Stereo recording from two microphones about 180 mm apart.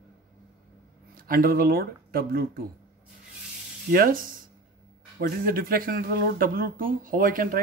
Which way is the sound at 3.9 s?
55° right (ahead or behind).